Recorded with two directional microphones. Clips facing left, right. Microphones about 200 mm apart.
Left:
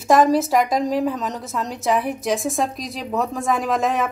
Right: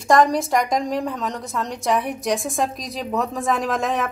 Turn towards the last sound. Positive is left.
turn(degrees=0)  # may be behind; listen again after turning